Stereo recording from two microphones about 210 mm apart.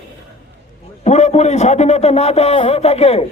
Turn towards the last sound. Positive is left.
turn(degrees=30)  # may be behind; listen again after turning